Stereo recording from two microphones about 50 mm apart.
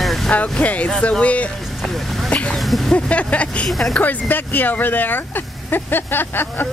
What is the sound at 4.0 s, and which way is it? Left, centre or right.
Speech, left.